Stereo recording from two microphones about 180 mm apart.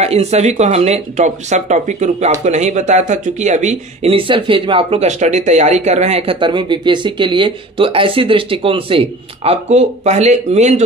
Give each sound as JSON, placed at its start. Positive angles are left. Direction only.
{"t": 0.0, "sound": "speech", "side_deg": -35}